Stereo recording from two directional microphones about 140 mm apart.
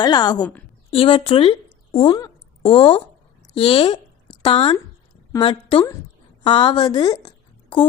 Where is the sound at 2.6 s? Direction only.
40° left (ahead or behind).